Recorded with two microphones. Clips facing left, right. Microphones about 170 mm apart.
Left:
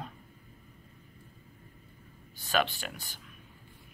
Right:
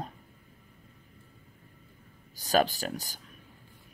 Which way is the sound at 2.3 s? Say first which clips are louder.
Right 4 dB; 40° right (ahead or behind).